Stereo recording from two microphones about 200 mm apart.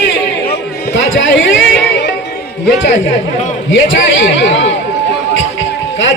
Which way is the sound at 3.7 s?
70° left (ahead or behind).